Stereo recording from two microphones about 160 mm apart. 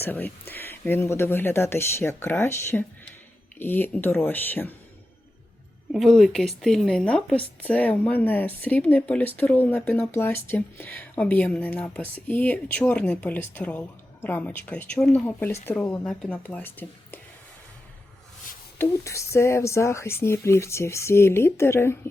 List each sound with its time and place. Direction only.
0.0 s speech: 10° left (ahead or behind)
5.9 s speech: centre (ahead or behind)
18.8 s speech: 20° left (ahead or behind)